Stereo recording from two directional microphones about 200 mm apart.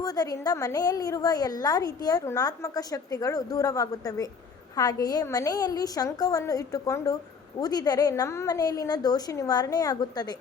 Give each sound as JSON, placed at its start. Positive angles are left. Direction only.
{"t": 0.0, "sound": "a woman's voice", "side_deg": 20}